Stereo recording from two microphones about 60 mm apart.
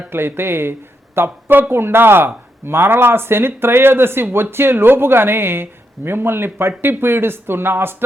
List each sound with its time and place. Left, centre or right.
0.1 s speech: right